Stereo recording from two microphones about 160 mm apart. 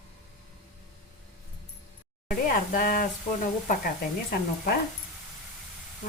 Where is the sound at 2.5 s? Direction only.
60° left (ahead or behind).